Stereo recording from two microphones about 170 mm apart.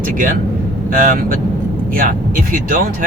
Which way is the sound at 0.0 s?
55° right (ahead or behind).